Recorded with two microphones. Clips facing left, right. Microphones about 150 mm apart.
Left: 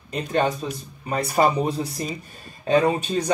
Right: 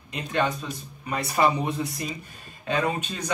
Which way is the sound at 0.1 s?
40° left (ahead or behind).